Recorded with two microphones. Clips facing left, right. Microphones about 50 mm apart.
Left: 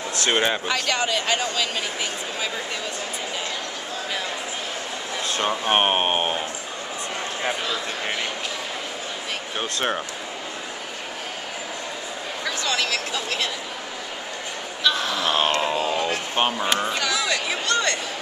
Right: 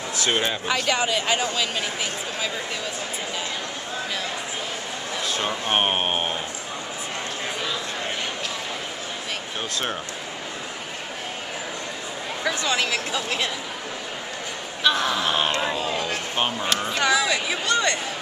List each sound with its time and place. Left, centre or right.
0.3 s speech: centre
0.7 s speech: centre
5.4 s speech: centre
12.4 s speech: centre
14.8 s speech: centre
15.2 s speech: centre
15.6 s a sound: centre
17.1 s speech: centre